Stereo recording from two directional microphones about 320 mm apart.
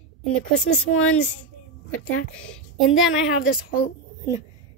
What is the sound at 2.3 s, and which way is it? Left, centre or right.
A woman's voice, centre.